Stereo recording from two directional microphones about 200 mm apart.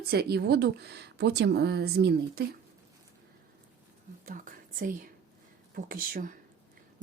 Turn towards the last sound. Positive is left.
turn(degrees=-45)  # may be behind; listen again after turning